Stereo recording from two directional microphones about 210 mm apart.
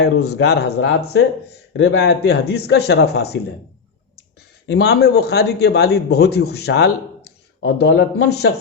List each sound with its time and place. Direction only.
0.0 s a man's voice: 50° left (ahead or behind)
4.7 s a man's voice: 50° left (ahead or behind)